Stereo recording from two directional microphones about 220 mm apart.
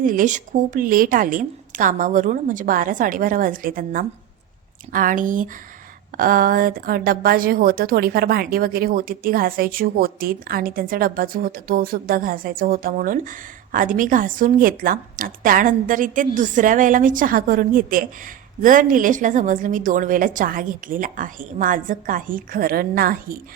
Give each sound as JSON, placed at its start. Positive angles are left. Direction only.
{"t": 0.0, "sound": "a woman's voice", "side_deg": -40}